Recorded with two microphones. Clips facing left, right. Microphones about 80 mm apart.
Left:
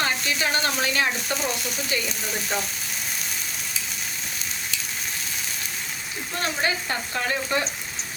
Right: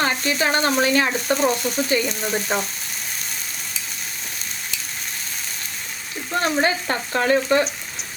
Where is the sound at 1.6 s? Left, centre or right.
Centre.